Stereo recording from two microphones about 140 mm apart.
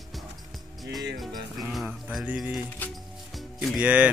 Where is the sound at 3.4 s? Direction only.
Centre (ahead or behind).